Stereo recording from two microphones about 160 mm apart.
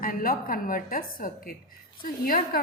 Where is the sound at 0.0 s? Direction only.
60° left (ahead or behind).